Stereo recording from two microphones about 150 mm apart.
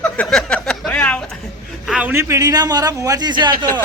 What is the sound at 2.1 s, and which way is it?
A man's voice, 20° right (ahead or behind).